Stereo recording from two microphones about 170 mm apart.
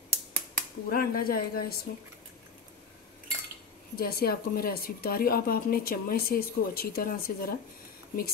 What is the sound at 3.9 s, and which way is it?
A woman's voice, 60° left (ahead or behind).